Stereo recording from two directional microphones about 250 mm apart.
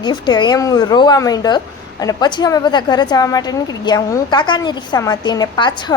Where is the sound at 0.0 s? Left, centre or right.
Centre.